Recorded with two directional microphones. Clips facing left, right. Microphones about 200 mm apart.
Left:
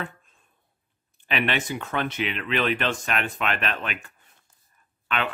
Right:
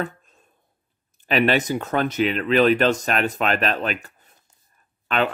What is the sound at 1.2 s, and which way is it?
Speech, 40° right (ahead or behind).